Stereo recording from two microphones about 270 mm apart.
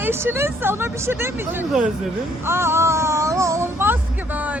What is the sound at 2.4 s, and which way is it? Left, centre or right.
Music, centre.